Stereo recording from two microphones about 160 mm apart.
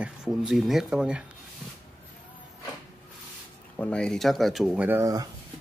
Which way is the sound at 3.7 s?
10° left (ahead or behind).